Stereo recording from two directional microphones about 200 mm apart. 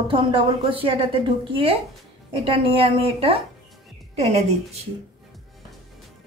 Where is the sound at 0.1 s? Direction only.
25° right (ahead or behind).